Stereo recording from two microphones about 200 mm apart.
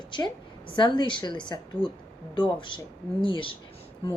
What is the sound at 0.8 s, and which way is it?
A woman's voice, 25° left (ahead or behind).